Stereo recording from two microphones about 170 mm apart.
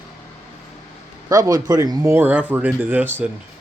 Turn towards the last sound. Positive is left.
turn(degrees=-10)  # may be behind; listen again after turning